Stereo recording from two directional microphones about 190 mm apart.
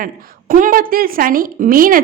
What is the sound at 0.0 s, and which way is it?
A woman's voice, 45° right (ahead or behind).